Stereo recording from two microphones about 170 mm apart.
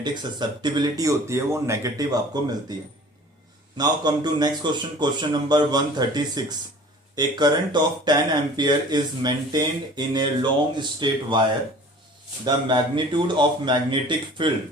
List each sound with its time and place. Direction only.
0.0 s speech: 25° right (ahead or behind)
3.8 s speech: 25° right (ahead or behind)
12.5 s speech: 25° right (ahead or behind)